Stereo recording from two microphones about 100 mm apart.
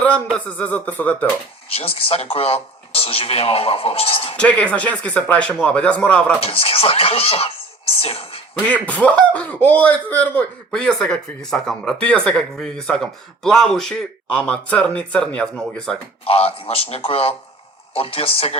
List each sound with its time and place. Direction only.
0.3 s speech: 15° left (ahead or behind)
1.7 s speech: 70° left (ahead or behind)
4.4 s speech: 15° left (ahead or behind)
6.4 s speech: 70° left (ahead or behind)
8.7 s speech: 15° left (ahead or behind)
16.2 s a man's voice: 75° left (ahead or behind)